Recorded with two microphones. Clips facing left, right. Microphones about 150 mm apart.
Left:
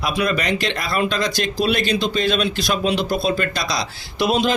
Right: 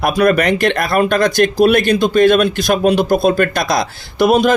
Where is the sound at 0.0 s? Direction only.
55° right (ahead or behind).